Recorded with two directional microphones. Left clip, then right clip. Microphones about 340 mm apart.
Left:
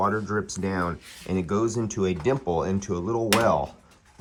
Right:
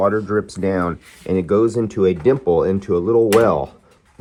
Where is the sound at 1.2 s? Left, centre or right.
Centre.